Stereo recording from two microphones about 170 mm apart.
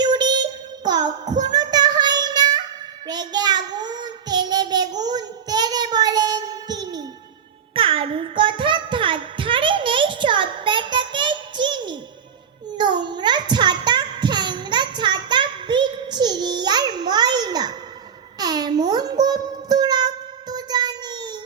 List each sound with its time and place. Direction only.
0.0 s child singing: 25° right (ahead or behind)
18.3 s music: 25° right (ahead or behind)